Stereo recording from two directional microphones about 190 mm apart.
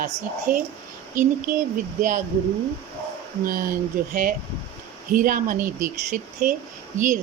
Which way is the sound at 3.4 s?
45° right (ahead or behind).